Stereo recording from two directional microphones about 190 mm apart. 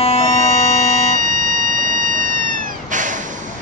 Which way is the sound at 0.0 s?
30° left (ahead or behind).